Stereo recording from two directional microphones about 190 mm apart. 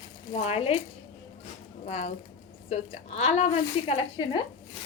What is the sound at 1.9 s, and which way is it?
A woman's voice, 35° left (ahead or behind).